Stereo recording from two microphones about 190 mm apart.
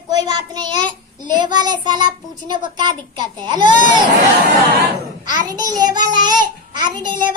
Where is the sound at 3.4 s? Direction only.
25° right (ahead or behind).